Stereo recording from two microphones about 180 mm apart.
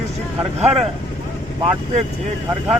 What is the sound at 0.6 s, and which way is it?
Speech, 35° right (ahead or behind).